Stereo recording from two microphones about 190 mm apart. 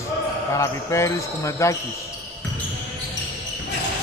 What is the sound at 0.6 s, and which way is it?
Speech, 15° left (ahead or behind).